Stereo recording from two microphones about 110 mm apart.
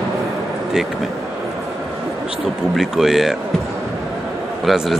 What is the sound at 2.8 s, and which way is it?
Speech, centre (ahead or behind).